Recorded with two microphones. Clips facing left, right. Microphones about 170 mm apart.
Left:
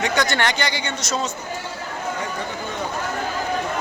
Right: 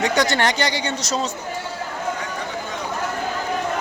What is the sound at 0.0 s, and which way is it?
Speech, 35° right (ahead or behind).